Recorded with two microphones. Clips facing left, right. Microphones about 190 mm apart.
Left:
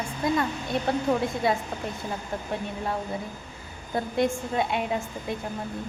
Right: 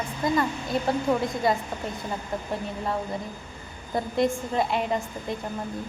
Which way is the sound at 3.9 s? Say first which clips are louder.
Right 1 dB; centre (ahead or behind).